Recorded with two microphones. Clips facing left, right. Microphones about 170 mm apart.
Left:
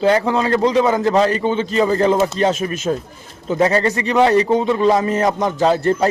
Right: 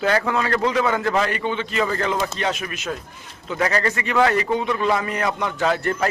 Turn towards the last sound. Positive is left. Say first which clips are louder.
# left 6 dB
turn(degrees=35)  # may be behind; listen again after turning